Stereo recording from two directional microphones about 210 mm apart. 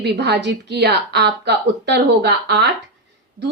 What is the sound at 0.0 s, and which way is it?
A woman's voice, 55° right (ahead or behind).